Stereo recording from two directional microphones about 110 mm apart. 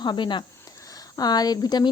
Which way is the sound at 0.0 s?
45° left (ahead or behind).